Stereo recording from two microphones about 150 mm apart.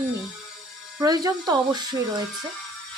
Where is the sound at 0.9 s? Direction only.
25° right (ahead or behind).